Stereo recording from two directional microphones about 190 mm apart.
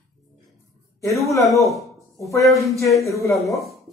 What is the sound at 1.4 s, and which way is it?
Speech, centre (ahead or behind).